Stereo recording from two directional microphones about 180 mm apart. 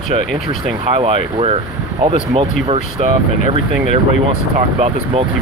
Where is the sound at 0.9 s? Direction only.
30° right (ahead or behind).